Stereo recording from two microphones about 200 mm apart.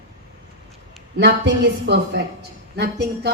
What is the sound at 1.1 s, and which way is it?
A woman's voice, 60° right (ahead or behind).